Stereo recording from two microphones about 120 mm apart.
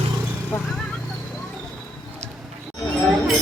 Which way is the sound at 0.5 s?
20° left (ahead or behind).